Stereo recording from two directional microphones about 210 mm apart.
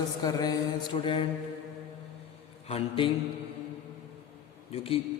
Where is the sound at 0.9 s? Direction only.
25° left (ahead or behind).